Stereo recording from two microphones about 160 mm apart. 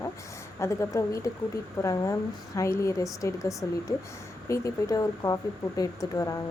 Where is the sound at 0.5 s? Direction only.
20° left (ahead or behind).